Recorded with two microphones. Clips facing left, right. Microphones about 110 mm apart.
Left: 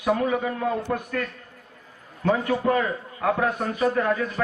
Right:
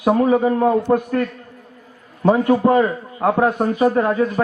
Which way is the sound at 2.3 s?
35° right (ahead or behind).